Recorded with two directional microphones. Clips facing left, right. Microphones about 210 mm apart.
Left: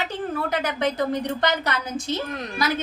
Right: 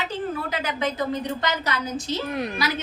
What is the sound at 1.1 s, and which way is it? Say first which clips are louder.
Speech: left 2 dB; 55° left (ahead or behind).